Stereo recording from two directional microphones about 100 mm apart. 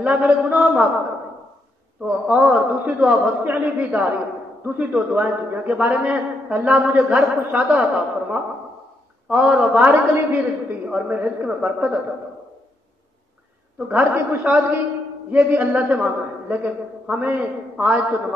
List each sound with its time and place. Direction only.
0.0 s a man's voice: 15° right (ahead or behind)
2.0 s a man's voice: 10° right (ahead or behind)
13.7 s a man's voice: 15° right (ahead or behind)